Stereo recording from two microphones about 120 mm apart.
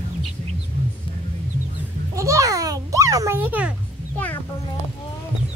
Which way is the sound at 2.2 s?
25° right (ahead or behind).